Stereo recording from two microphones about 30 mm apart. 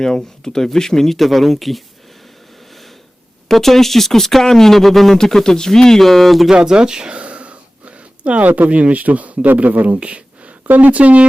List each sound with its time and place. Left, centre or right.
0.4 s speech: centre
3.5 s speech: centre
5.1 s speech: centre
6.0 s speech: centre
6.7 s a sound: right
8.7 s speech: right
9.8 s speech: right
10.8 s speech: right